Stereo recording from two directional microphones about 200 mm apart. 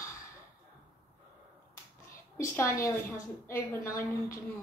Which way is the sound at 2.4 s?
15° left (ahead or behind).